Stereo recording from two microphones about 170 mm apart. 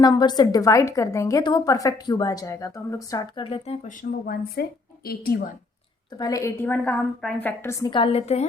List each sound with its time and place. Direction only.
0.0 s a woman's voice: 25° left (ahead or behind)
3.4 s a woman's voice: 35° left (ahead or behind)
3.8 s speech: 60° left (ahead or behind)
6.1 s a woman's voice: 20° left (ahead or behind)
7.9 s a woman's voice: 30° left (ahead or behind)